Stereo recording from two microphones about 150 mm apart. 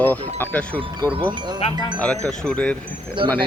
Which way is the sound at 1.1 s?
30° right (ahead or behind).